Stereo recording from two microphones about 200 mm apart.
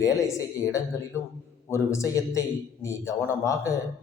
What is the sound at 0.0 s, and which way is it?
A man's voice, 15° left (ahead or behind).